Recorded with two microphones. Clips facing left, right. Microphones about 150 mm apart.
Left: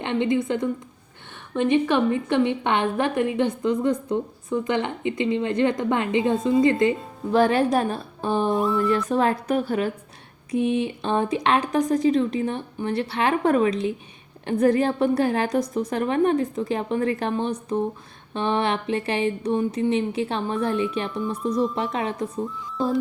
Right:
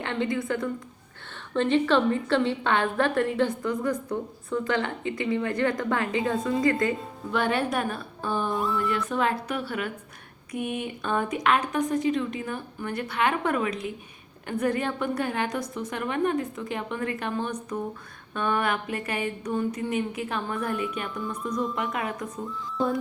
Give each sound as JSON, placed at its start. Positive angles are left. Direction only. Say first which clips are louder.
{"t": 0.0, "sound": "a woman's voice", "louder": "left 5 dB", "side_deg": 20}
{"t": 7.3, "sound": "a woman's voice", "louder": "left 7 dB", "side_deg": 35}
{"t": 8.5, "sound": "a sound", "louder": "left 5 dB", "side_deg": 0}
{"t": 8.9, "sound": "a woman's voice", "louder": "left 5 dB", "side_deg": 40}
{"t": 10.5, "sound": "a woman's voice", "louder": "left 8 dB", "side_deg": 30}